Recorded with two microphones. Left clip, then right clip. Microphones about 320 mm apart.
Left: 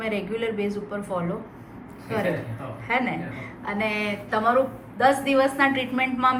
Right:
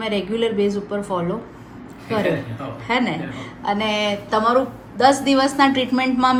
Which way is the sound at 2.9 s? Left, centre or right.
Centre.